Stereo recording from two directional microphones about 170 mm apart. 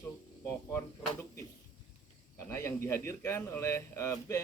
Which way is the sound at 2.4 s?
15° left (ahead or behind).